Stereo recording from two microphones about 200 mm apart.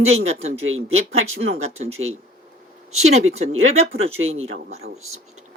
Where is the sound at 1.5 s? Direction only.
30° right (ahead or behind).